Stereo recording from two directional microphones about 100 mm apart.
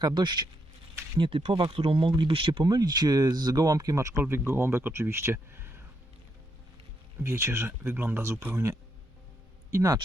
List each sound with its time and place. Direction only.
0.0 s speech: 50° right (ahead or behind)
1.2 s speech: 70° right (ahead or behind); by 5.8 s 25° right (ahead or behind)
7.2 s speech: 25° right (ahead or behind)